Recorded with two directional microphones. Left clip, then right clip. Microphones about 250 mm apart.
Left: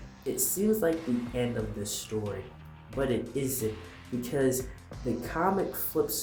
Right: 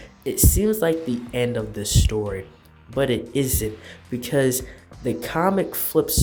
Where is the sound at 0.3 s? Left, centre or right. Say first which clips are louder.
Right 7 dB; right.